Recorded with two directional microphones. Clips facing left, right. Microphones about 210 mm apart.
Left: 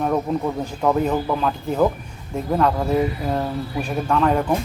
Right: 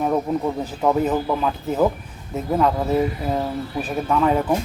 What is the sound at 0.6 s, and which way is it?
Speech, 5° right (ahead or behind).